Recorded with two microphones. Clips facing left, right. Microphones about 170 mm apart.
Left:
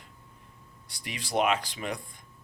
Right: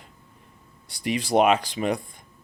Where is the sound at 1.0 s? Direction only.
20° right (ahead or behind).